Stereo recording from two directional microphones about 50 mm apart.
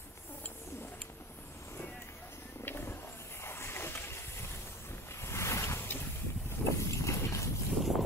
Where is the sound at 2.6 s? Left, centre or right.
Left.